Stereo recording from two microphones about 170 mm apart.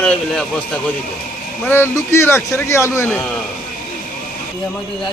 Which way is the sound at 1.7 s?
15° left (ahead or behind).